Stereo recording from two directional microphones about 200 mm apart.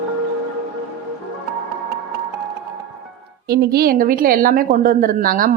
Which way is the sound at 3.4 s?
50° right (ahead or behind).